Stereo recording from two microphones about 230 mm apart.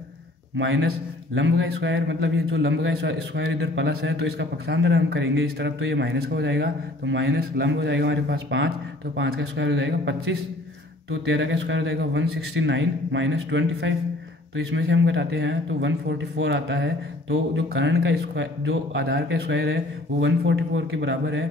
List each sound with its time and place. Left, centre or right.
0.6 s a man's voice: right